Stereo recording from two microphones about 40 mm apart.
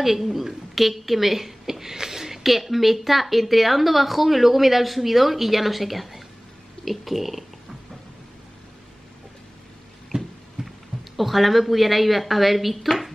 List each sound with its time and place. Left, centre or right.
0.0 s a woman's voice: centre
10.1 s a sound: right
10.6 s heart sounds: centre
11.1 s a woman's voice: centre